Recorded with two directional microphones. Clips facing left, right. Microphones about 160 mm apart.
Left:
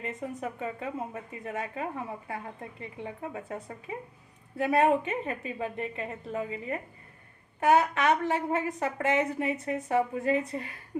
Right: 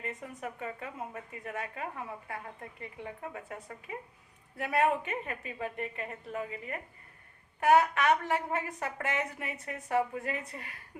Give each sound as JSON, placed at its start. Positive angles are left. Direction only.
{"t": 0.0, "sound": "speech", "side_deg": 25}